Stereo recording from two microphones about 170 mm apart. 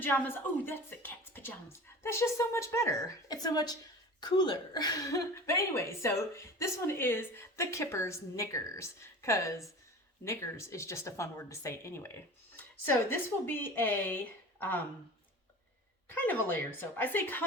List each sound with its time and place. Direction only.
0.1 s a woman's voice: 10° left (ahead or behind)
16.0 s a woman's voice: 10° left (ahead or behind)